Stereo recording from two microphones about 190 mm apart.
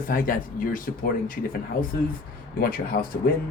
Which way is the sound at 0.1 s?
45° left (ahead or behind).